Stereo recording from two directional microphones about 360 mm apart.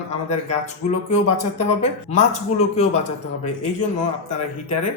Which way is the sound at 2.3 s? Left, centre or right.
Centre.